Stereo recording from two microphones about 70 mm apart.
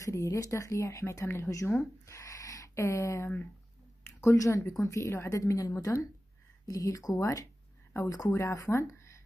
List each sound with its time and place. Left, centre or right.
0.0 s speech: left
2.0 s a sound: left
4.2 s speech: left